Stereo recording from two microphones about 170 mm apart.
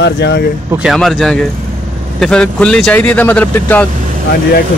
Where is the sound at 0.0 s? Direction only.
85° left.